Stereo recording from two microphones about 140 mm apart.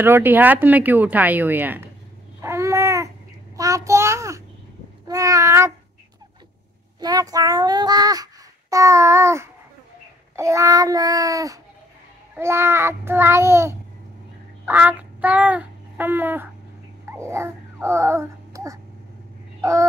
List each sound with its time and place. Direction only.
0.0 s speech: 15° right (ahead or behind)
2.4 s babbling: 20° right (ahead or behind)
3.5 s child singing: 25° right (ahead or behind)
7.0 s a child's voice: 25° right (ahead or behind)
10.3 s child singing: 20° right (ahead or behind)
17.0 s babbling: 20° right (ahead or behind)
19.6 s a sound: 20° right (ahead or behind)